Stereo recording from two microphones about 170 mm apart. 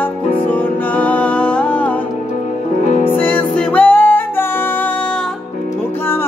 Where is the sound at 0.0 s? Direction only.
10° left (ahead or behind).